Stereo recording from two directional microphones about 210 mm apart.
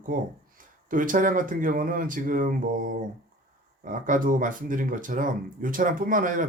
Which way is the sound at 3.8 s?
40° right (ahead or behind).